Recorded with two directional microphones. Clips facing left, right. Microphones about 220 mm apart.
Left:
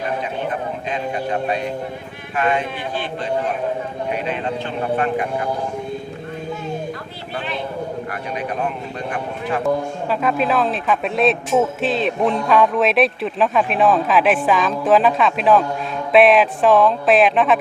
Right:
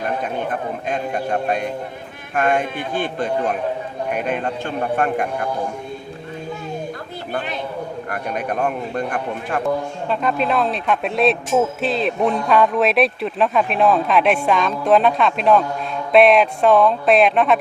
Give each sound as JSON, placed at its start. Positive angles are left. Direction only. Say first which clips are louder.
{"t": 0.9, "sound": "speech", "louder": "right 1 dB", "side_deg": -50}
{"t": 8.1, "sound": "speech", "louder": "right 2 dB", "side_deg": -50}
{"t": 9.6, "sound": "a man's voice", "louder": "left 2 dB", "side_deg": 5}